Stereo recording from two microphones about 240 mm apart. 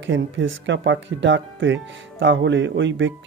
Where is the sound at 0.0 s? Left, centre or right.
Right.